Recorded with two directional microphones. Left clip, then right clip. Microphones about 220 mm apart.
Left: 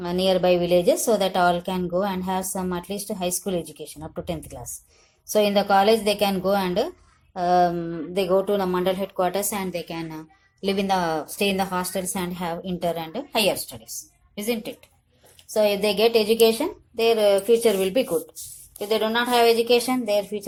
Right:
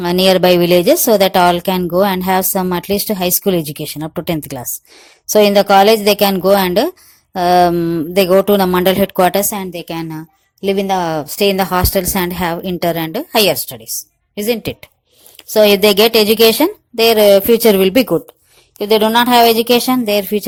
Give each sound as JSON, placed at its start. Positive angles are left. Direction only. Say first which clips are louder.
{"t": 0.0, "sound": "a woman's voice", "louder": "right 10 dB", "side_deg": -45}